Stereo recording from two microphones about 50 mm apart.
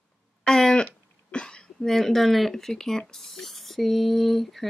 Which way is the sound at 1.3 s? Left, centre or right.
Centre.